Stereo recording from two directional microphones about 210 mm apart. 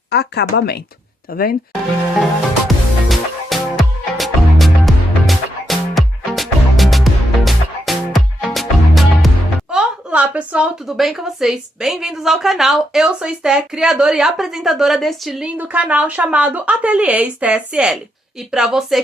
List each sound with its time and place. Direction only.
0.1 s speech: 50° left (ahead or behind)
2.6 s music: centre (ahead or behind)
9.7 s a woman's voice: 5° right (ahead or behind)